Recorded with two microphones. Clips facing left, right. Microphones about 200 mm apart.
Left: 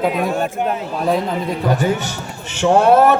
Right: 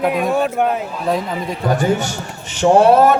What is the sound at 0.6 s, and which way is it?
Speech, 60° right (ahead or behind).